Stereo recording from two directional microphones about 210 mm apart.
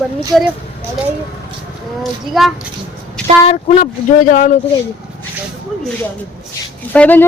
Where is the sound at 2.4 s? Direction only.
Centre (ahead or behind).